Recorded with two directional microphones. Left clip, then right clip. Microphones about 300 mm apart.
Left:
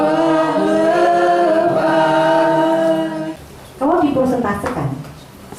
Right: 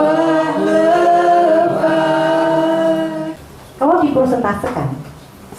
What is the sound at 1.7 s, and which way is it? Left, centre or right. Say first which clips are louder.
Chant: even; centre.